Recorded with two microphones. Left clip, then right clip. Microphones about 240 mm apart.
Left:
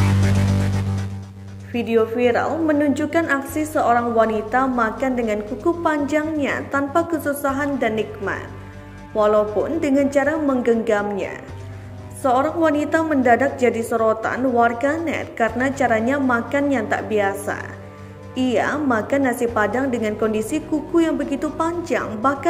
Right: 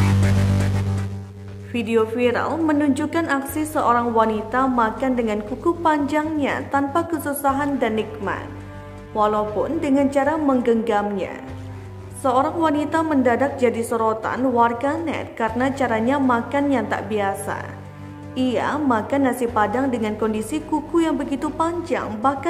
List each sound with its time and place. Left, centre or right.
0.0 s music: centre
1.7 s a woman's voice: centre